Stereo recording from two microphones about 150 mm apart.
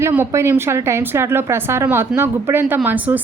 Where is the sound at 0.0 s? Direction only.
15° right (ahead or behind).